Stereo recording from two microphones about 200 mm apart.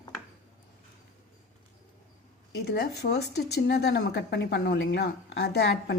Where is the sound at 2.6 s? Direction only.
55° left (ahead or behind).